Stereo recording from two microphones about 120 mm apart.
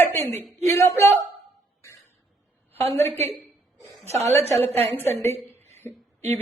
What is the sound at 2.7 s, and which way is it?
A woman's voice, 60° right (ahead or behind).